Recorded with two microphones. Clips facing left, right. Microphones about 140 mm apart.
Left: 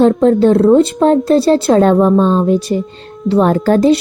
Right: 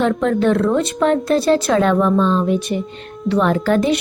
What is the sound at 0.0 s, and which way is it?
Speech, 30° left (ahead or behind).